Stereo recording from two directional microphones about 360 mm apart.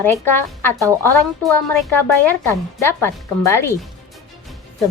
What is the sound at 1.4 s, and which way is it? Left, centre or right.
A woman's voice, centre.